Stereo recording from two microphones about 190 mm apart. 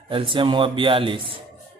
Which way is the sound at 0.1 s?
25° right (ahead or behind).